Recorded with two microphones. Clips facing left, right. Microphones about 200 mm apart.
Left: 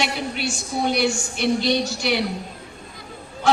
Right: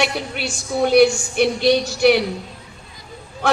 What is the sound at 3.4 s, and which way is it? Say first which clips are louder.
Speech: left 1 dB; 60° right (ahead or behind).